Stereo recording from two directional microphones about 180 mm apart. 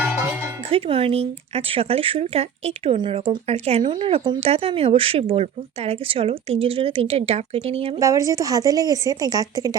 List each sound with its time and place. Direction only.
0.7 s speech: 30° right (ahead or behind)
7.9 s a woman's voice: 20° right (ahead or behind)